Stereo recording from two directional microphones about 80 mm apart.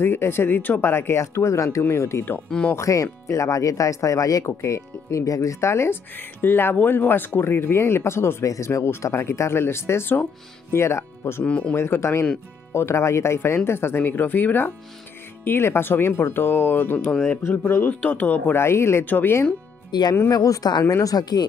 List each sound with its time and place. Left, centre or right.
0.0 s speech: left
2.7 s speech: left
11.4 s speech: centre
11.7 s speech: left
18.6 s speech: left
19.0 s speech: left
19.9 s speech: left
20.2 s speech: left
20.8 s speech: left